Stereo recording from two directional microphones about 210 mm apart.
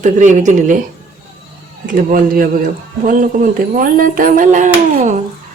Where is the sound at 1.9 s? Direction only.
40° right (ahead or behind).